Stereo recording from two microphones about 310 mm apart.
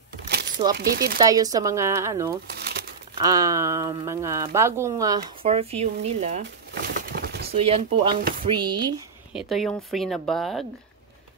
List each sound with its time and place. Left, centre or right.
0.3 s crumpling: right
0.7 s speech: right
1.2 s speech: centre; by 7.4 s right
7.5 s speech: centre
9.3 s speech: centre